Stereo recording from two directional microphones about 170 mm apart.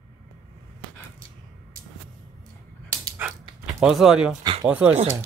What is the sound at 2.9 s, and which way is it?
Dog, 15° right (ahead or behind).